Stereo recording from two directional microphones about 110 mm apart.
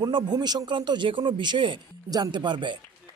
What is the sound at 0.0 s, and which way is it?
Speech, 40° right (ahead or behind).